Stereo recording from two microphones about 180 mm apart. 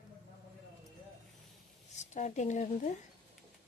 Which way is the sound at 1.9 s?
40° left (ahead or behind).